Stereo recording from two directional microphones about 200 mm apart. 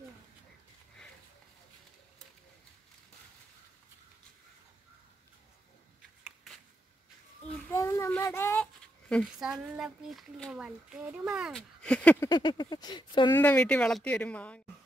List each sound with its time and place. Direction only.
7.7 s speech: 15° left (ahead or behind)
12.3 s speech: 20° left (ahead or behind)
13.3 s speech: 10° left (ahead or behind)